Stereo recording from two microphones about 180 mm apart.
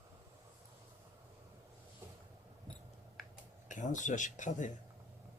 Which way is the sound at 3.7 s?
45° left (ahead or behind).